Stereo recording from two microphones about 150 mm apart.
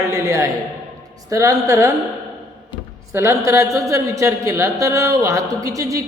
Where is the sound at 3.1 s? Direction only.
20° right (ahead or behind).